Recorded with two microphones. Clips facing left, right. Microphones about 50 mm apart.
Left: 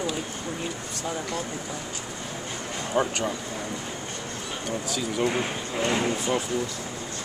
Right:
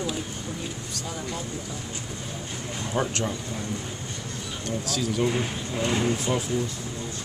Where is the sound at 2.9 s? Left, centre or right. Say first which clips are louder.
Left 2 dB; centre.